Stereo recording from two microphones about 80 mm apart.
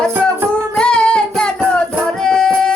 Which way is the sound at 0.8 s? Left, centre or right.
Centre.